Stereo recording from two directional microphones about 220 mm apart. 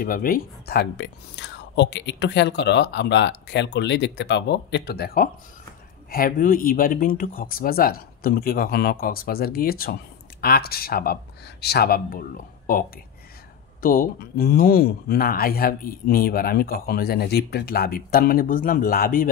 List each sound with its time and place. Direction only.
0.0 s a man's voice: 40° left (ahead or behind)